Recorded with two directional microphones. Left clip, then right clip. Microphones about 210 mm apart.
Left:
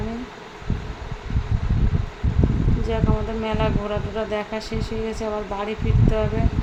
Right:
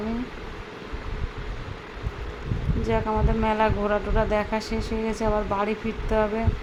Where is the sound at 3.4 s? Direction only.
Centre (ahead or behind).